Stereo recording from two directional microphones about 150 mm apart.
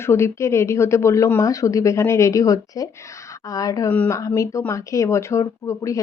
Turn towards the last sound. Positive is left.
turn(degrees=20)  # may be behind; listen again after turning